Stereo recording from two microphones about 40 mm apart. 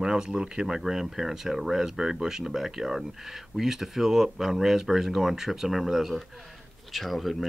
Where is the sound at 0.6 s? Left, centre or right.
Centre.